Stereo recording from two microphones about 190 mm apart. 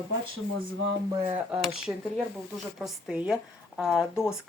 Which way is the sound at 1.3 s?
10° right (ahead or behind).